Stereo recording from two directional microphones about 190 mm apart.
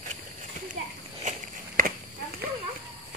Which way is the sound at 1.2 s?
40° right (ahead or behind).